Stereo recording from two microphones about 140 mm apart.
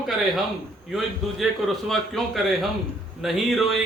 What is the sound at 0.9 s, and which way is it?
Speech, centre (ahead or behind).